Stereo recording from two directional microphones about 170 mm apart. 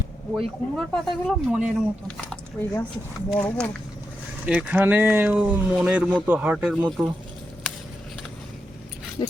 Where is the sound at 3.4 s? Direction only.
10° left (ahead or behind).